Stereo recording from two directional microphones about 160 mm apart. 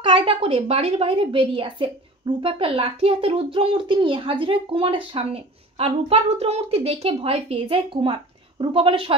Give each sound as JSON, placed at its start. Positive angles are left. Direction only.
{"t": 0.0, "sound": "a woman's voice", "side_deg": -30}